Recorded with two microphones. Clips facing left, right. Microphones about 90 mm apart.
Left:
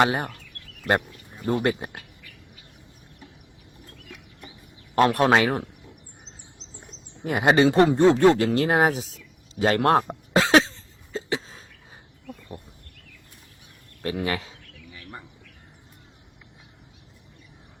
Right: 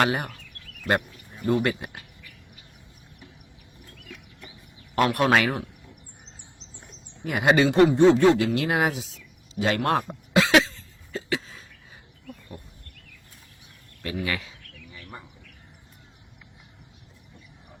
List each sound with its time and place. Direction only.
0.0 s speech: 30° left (ahead or behind)
1.5 s speech: 30° left (ahead or behind)
4.9 s speech: 30° left (ahead or behind)
7.3 s speech: 30° left (ahead or behind)
9.6 s cough: 40° left (ahead or behind)
12.3 s a sound: 25° left (ahead or behind)
14.0 s speech: 35° left (ahead or behind)
14.9 s bird: centre (ahead or behind)